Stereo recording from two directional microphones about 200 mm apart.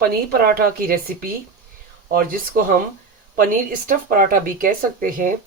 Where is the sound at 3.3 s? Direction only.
40° right (ahead or behind).